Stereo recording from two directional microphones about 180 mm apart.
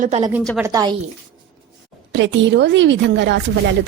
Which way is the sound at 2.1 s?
85° right.